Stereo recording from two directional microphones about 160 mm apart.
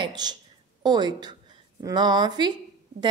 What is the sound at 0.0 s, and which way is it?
A woman's voice, 25° right (ahead or behind).